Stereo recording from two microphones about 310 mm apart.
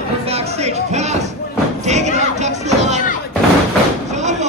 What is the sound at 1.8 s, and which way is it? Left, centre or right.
Music, right.